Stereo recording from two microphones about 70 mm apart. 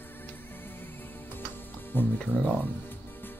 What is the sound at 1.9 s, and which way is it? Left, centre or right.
Speech, left.